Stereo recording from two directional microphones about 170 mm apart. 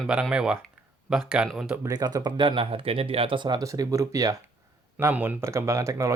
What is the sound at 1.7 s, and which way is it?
Speech, 20° right (ahead or behind).